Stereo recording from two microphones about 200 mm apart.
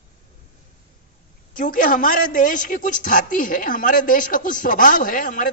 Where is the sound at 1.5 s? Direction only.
40° left (ahead or behind).